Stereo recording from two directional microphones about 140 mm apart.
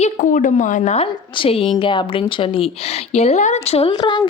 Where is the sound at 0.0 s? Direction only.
65° left (ahead or behind).